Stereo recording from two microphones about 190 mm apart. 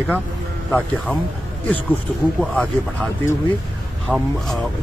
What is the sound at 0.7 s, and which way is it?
Speech, 10° left (ahead or behind).